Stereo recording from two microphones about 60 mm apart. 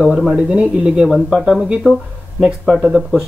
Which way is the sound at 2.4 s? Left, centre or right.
Centre.